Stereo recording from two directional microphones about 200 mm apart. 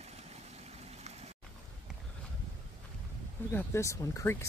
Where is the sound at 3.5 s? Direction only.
10° left (ahead or behind).